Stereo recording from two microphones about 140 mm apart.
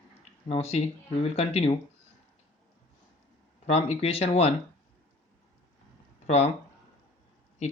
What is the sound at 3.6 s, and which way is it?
Speech, 50° left (ahead or behind).